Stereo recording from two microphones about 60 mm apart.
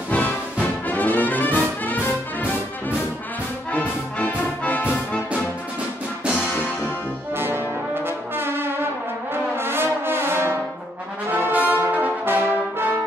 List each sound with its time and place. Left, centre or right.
0.1 s brass instrument: left
3.7 s music: left
6.5 s music: left
7.3 s brass instrument: right